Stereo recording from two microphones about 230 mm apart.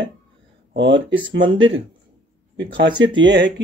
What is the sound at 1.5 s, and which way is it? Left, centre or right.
Speech, right.